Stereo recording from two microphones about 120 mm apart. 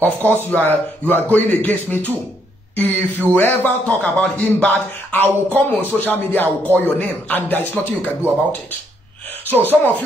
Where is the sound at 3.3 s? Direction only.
15° left (ahead or behind).